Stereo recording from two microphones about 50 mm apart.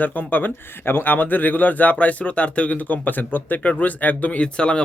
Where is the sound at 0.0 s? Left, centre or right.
Left.